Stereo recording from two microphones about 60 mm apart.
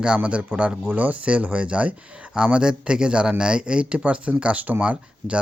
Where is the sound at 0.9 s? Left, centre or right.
Right.